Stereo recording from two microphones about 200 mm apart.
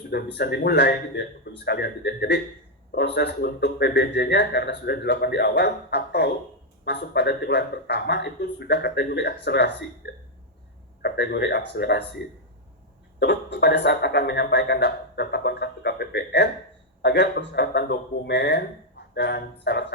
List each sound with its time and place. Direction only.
0.3 s speech: 55° left (ahead or behind)
10.0 s hiccup: 60° left (ahead or behind)
11.0 s speech: 55° left (ahead or behind)
13.1 s speech: 60° left (ahead or behind)